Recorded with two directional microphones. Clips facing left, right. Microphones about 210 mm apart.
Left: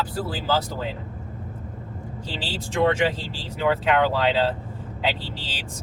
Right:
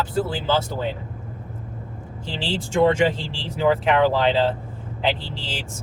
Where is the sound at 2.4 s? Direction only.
25° right (ahead or behind).